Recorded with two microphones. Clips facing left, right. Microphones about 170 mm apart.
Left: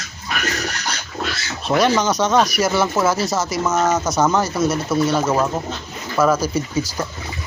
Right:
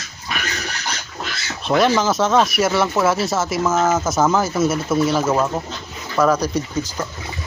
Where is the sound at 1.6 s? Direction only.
Centre (ahead or behind).